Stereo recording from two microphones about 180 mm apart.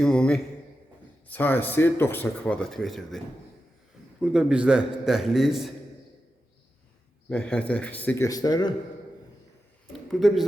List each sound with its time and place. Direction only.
0.0 s a man's voice: 5° left (ahead or behind)
4.2 s a man's voice: 5° right (ahead or behind)
7.3 s speech: 5° left (ahead or behind)
8.3 s a man's voice: 20° left (ahead or behind)
10.1 s a man's voice: centre (ahead or behind)